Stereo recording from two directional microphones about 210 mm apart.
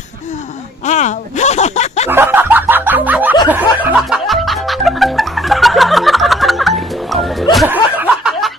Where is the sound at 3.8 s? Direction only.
Centre (ahead or behind).